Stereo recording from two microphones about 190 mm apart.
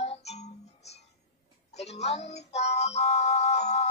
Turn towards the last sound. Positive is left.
turn(degrees=35)  # may be behind; listen again after turning